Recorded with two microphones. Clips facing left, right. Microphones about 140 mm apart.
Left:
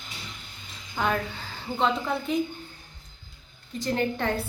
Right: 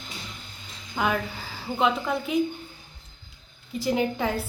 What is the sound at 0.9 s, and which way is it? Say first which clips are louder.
A woman's voice: right 1 dB; 5° right (ahead or behind).